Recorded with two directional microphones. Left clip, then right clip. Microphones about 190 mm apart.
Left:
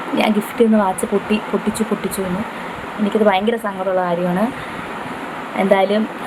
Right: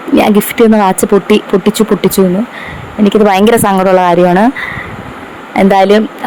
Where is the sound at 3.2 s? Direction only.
60° right (ahead or behind).